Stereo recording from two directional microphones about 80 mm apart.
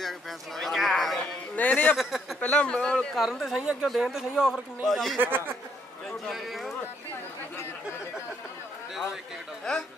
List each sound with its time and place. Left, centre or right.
0.6 s speech: centre
1.6 s speech: centre
2.0 s speech: centre
2.4 s a man's voice: centre
3.2 s speech: centre
5.2 s speech: right
6.2 s speech: centre
9.7 s a man's voice: centre